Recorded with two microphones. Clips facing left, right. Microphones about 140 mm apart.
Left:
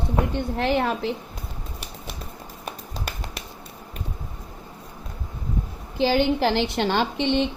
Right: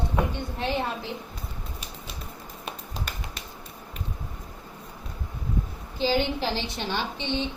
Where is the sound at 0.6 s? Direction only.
80° left.